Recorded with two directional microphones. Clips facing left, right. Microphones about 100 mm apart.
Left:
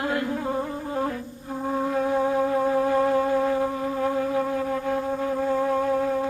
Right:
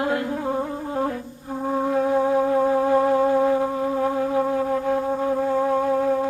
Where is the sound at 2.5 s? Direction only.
25° right (ahead or behind).